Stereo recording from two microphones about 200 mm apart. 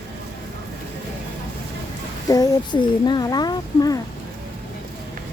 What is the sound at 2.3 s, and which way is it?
Speech, 20° left (ahead or behind).